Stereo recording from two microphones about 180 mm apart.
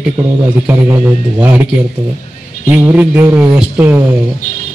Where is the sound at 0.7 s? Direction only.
20° right (ahead or behind).